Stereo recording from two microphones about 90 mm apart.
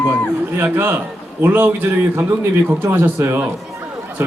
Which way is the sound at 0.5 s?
25° right (ahead or behind).